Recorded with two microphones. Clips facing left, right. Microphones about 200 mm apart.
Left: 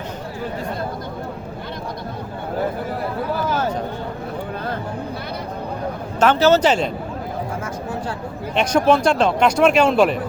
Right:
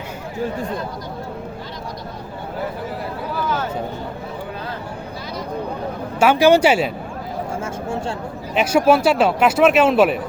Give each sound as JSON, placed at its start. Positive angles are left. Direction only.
{"t": 6.1, "sound": "speech", "side_deg": -10}
{"t": 7.6, "sound": "a sound", "side_deg": -25}
{"t": 8.5, "sound": "speech", "side_deg": -5}